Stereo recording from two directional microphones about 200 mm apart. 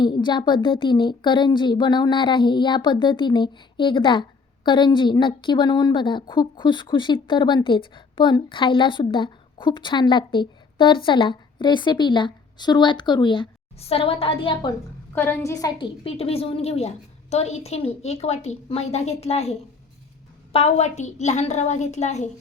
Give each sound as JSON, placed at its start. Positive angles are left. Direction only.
{"t": 0.0, "sound": "speech", "side_deg": 20}
{"t": 15.1, "sound": "a woman's voice", "side_deg": 10}